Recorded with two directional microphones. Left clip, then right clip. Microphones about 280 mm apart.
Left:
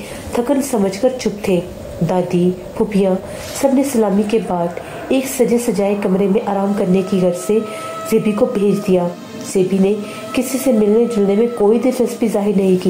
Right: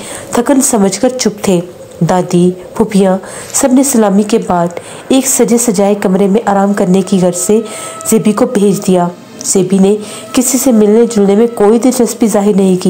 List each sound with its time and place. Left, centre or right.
0.3 s a woman's voice: right